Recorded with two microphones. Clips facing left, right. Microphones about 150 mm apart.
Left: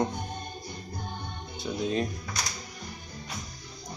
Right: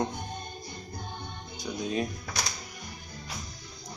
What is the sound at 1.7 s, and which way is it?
Speech, 5° left (ahead or behind).